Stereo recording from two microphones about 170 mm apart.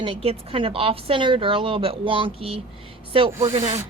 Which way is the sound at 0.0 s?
35° right (ahead or behind).